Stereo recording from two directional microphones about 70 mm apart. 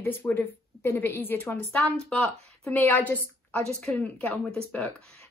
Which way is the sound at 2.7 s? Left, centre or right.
Left.